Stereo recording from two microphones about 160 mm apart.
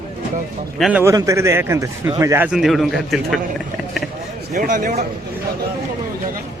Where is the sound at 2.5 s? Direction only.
Centre (ahead or behind).